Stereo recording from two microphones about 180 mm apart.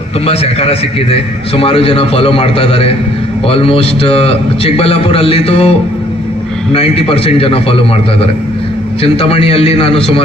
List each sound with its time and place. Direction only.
0.3 s a man's voice: 35° left (ahead or behind)
6.7 s a man's voice: 30° left (ahead or behind)